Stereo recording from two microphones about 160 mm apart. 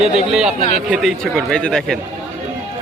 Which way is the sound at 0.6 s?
40° left (ahead or behind).